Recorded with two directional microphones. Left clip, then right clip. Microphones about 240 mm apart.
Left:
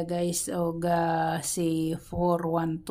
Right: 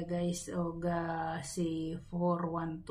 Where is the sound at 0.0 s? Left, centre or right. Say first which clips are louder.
Left 8 dB; left.